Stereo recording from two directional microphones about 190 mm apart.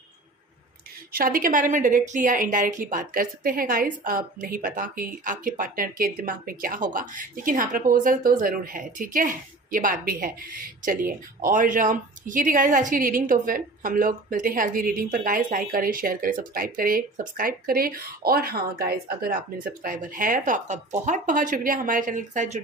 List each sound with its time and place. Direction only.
1.1 s a woman's voice: 50° right (ahead or behind)